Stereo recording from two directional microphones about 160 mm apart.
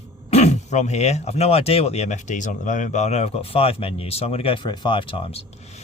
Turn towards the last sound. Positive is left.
turn(degrees=35)  # may be behind; listen again after turning